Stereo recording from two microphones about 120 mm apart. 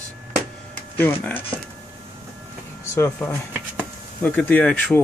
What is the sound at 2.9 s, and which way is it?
Speech, 25° left (ahead or behind).